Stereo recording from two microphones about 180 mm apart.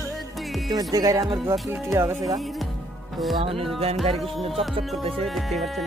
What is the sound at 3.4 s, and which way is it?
Music, 30° right (ahead or behind).